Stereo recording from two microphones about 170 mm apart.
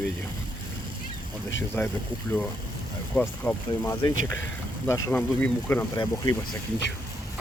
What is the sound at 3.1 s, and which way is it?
Speech, 10° left (ahead or behind).